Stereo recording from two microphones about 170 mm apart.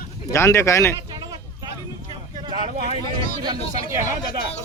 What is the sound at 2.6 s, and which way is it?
Speech, 55° right (ahead or behind).